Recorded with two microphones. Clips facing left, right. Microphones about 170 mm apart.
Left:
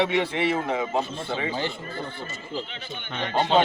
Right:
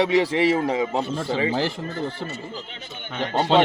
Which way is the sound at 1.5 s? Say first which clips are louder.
Right 5 dB; 90° right.